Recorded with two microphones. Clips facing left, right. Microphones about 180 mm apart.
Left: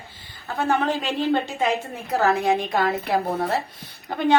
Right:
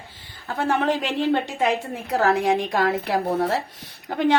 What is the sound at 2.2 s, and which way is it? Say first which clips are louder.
Speech: right 1 dB; 85° right.